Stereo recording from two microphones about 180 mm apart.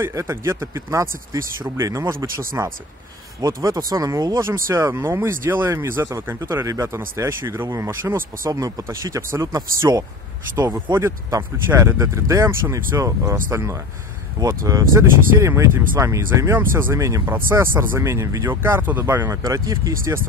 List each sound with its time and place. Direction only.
0.0 s speech: 15° right (ahead or behind)